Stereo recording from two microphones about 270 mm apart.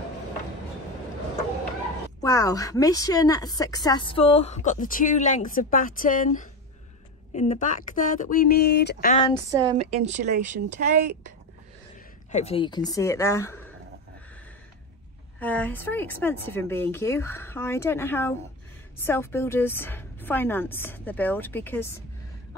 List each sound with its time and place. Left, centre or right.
2.2 s a woman's voice: centre; by 9.1 s left
9.5 s speech: centre
12.3 s speech: left
15.3 s speech: centre